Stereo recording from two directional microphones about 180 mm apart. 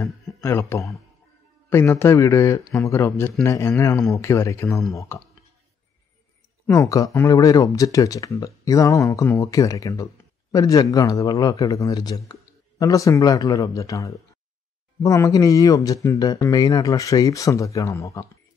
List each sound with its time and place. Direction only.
0.4 s a man's voice: 15° left (ahead or behind)
6.7 s speech: 20° left (ahead or behind)